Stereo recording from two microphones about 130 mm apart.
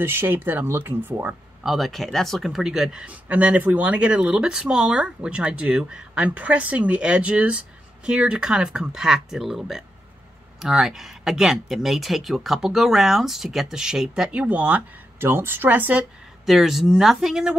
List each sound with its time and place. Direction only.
0.0 s speech: 15° right (ahead or behind)
1.6 s speech: centre (ahead or behind)
16.4 s speech: centre (ahead or behind)